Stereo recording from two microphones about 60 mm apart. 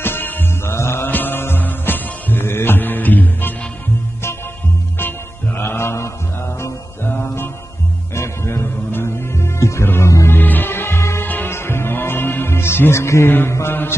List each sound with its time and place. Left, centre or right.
0.0 s music: left
5.6 s mantra: left
6.6 s music: left
10.2 s music: left
11.2 s music: left
11.5 s music: left
13.5 s mantra: left